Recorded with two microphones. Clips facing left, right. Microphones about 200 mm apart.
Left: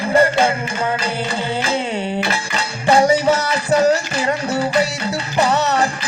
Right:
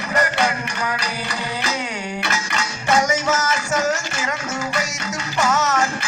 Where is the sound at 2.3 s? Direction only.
35° left (ahead or behind).